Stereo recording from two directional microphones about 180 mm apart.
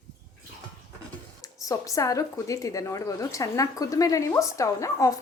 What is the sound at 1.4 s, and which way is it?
A woman's voice, 20° left (ahead or behind).